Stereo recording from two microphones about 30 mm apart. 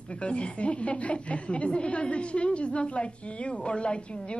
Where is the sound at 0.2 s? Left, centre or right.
Left.